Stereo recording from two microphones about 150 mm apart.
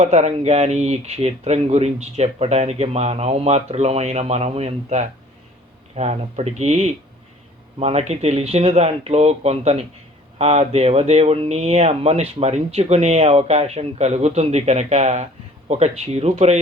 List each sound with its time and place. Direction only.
0.0 s speech: 45° right (ahead or behind)